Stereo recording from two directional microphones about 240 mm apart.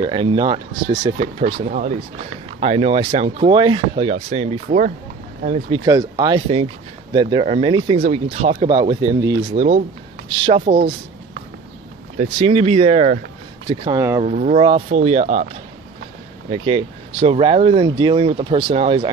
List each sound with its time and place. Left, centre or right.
0.0 s speech: right
1.2 s speech: right
12.2 s speech: right
14.2 s speech: right